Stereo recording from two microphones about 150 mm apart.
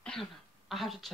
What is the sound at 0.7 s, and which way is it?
Speech, centre (ahead or behind).